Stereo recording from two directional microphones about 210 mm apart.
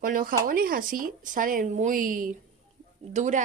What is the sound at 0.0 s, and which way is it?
A woman's voice, 40° right (ahead or behind).